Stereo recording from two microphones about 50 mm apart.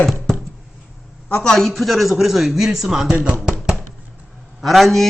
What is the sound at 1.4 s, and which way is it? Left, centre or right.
Speech, centre.